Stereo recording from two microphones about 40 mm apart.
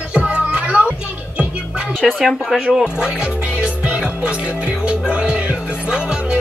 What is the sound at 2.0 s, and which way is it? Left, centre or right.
Speech, centre.